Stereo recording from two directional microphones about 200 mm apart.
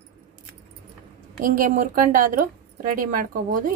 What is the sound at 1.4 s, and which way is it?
A woman's voice, 45° right (ahead or behind).